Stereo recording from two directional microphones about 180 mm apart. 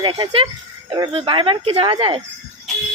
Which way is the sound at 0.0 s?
25° right (ahead or behind).